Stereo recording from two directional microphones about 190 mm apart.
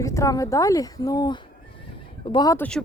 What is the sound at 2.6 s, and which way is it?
Speech, 5° left (ahead or behind).